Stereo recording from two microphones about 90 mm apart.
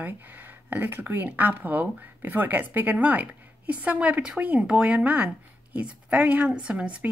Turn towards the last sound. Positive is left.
turn(degrees=-15)  # may be behind; listen again after turning